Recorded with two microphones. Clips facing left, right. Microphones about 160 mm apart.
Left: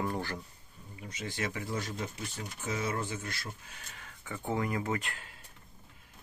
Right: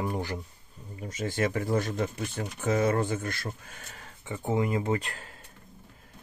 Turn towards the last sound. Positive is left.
turn(degrees=-35)  # may be behind; listen again after turning